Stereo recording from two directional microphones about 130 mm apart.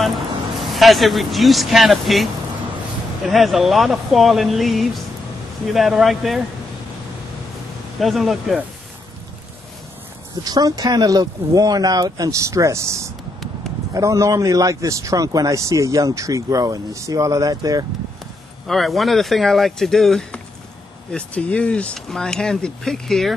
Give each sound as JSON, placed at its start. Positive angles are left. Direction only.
{"t": 0.6, "sound": "speech", "side_deg": 0}
{"t": 3.3, "sound": "speech", "side_deg": 0}
{"t": 8.0, "sound": "speech", "side_deg": 0}
{"t": 10.4, "sound": "a man's voice", "side_deg": -30}
{"t": 18.7, "sound": "speech", "side_deg": 0}